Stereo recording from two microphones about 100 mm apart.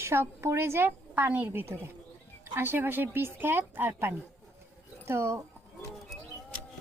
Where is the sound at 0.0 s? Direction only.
25° right (ahead or behind).